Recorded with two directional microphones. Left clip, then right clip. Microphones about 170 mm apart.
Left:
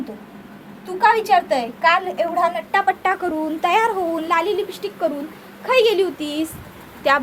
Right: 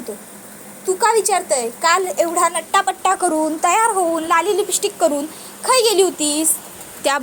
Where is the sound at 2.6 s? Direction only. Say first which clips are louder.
Right 1 dB; 25° right (ahead or behind).